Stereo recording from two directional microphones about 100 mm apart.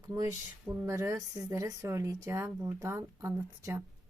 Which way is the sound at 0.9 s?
30° right (ahead or behind).